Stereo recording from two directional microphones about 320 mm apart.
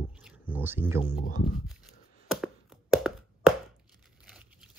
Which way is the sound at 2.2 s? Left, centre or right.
Centre.